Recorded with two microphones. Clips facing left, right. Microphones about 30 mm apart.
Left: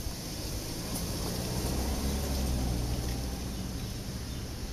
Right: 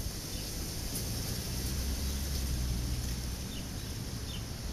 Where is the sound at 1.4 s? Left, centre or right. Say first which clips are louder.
Left 5 dB; left.